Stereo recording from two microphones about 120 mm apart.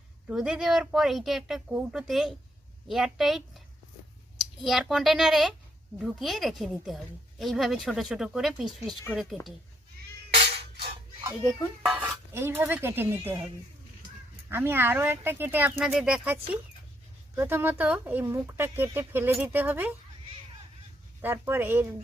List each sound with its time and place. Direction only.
0.3 s speech: 5° right (ahead or behind)
10.6 s a sound: 50° right (ahead or behind)
11.9 s speech: 15° right (ahead or behind)
14.5 s speech: 20° right (ahead or behind)
15.8 s speech: 5° right (ahead or behind)
21.2 s speech: 20° right (ahead or behind)